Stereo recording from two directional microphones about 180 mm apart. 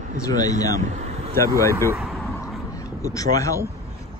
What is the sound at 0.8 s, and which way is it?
Vehicle, 40° right (ahead or behind).